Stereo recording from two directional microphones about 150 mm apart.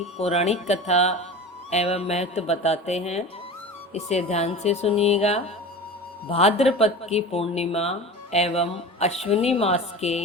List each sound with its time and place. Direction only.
0.2 s speech: 45° left (ahead or behind)